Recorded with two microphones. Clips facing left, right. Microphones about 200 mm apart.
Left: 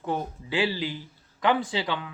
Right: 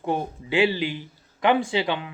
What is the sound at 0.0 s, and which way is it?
Speech, 20° right (ahead or behind).